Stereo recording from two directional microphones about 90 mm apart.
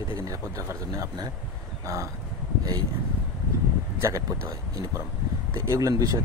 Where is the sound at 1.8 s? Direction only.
35° right (ahead or behind).